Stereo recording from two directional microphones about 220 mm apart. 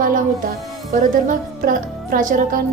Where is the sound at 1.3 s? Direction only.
40° right (ahead or behind).